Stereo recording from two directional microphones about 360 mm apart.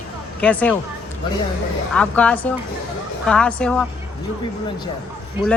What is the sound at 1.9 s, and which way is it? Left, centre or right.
Speech, centre.